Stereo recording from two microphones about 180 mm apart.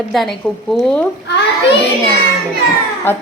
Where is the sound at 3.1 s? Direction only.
10° left (ahead or behind).